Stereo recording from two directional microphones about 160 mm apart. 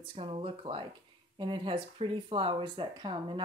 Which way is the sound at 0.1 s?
35° right (ahead or behind).